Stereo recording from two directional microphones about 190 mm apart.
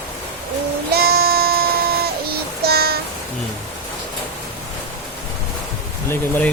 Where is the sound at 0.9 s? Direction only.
55° right (ahead or behind).